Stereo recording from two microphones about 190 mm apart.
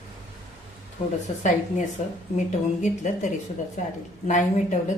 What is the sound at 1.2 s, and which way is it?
Speech, 40° left (ahead or behind).